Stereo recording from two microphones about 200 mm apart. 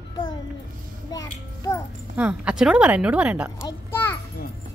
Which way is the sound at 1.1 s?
15° left (ahead or behind).